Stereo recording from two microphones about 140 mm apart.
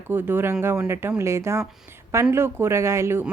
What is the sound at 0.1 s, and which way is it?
Speech, 15° right (ahead or behind).